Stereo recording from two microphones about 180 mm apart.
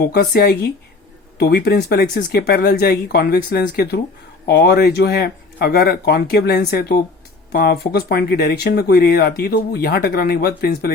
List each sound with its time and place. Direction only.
0.0 s speech: 60° left (ahead or behind)